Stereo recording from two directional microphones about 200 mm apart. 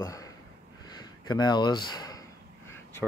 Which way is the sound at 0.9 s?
20° left (ahead or behind).